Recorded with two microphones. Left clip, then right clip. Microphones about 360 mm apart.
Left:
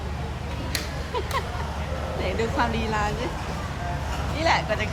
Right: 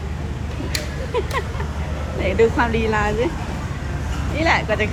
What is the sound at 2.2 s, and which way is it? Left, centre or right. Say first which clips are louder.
Speech: right 9 dB; centre.